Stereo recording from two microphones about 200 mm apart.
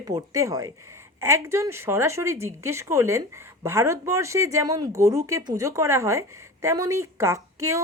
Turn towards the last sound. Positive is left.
turn(degrees=-15)  # may be behind; listen again after turning